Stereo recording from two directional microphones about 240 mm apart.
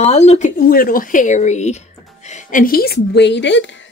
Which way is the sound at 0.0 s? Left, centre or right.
Left.